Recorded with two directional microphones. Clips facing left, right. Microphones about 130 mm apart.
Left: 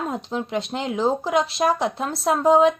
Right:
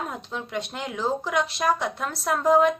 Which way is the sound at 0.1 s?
35° left (ahead or behind).